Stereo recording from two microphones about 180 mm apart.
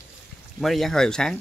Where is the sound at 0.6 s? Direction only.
Centre (ahead or behind).